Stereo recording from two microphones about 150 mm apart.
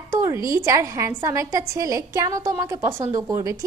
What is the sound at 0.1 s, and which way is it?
A woman's voice, 20° right (ahead or behind).